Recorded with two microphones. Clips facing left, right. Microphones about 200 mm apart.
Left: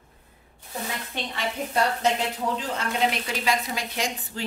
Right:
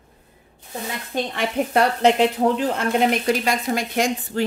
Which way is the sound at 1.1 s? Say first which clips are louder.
Right 10 dB; 55° right (ahead or behind).